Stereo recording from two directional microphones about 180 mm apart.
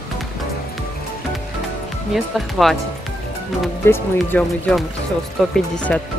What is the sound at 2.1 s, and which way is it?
Speech, centre (ahead or behind).